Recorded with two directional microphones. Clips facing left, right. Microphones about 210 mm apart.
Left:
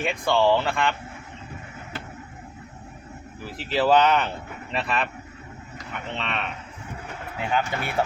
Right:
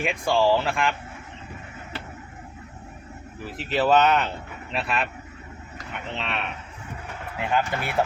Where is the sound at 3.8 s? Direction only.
5° right (ahead or behind).